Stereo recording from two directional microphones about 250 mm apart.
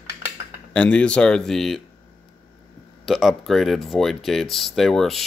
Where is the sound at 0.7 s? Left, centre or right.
Centre.